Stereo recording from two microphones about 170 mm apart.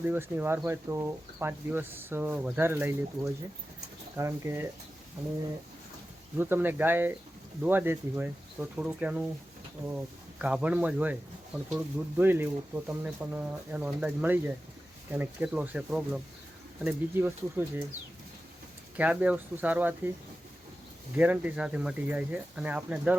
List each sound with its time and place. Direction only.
0.0 s speech: 10° right (ahead or behind)
6.3 s speech: 10° right (ahead or behind)
18.9 s speech: 10° right (ahead or behind)
21.2 s speech: 10° right (ahead or behind)